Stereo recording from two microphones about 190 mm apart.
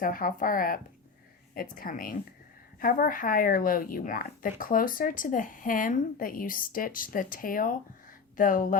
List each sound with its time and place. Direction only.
0.0 s speech: 45° left (ahead or behind)